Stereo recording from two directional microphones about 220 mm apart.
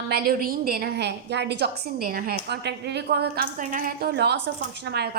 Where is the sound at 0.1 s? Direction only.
45° right (ahead or behind).